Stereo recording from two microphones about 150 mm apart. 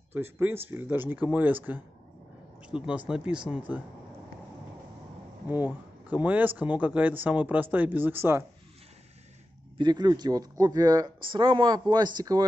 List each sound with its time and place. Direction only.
0.1 s speech: 15° right (ahead or behind)
5.5 s speech: 10° right (ahead or behind)
9.8 s a man's voice: 30° right (ahead or behind)